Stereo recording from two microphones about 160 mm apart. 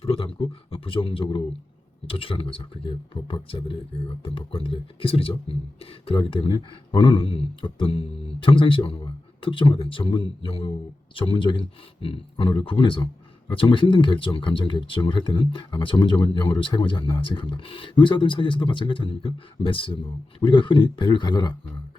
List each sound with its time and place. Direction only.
0.0 s a man's voice: 35° left (ahead or behind)